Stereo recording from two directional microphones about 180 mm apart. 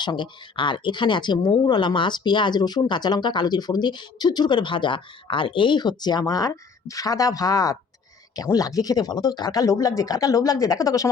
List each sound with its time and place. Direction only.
0.0 s speech: 25° left (ahead or behind)